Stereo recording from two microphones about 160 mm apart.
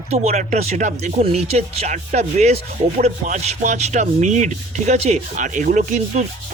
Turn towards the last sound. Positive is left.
turn(degrees=-50)  # may be behind; listen again after turning